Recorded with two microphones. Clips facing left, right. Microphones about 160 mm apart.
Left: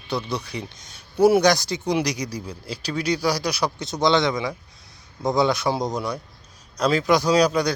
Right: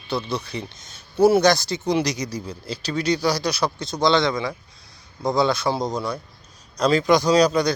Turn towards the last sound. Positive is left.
turn(degrees=10)  # may be behind; listen again after turning